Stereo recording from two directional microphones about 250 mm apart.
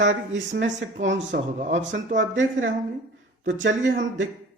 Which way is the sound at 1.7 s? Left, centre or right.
Right.